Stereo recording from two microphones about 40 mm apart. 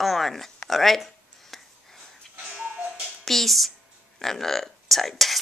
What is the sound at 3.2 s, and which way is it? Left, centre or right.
Speech, centre.